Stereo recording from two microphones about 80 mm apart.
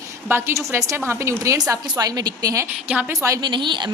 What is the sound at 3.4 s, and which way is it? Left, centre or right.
Speech, right.